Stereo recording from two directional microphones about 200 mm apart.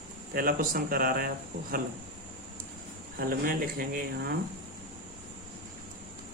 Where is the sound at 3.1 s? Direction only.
45° right (ahead or behind).